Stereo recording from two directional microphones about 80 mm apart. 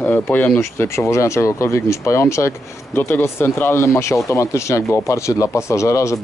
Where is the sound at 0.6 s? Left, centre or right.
Left.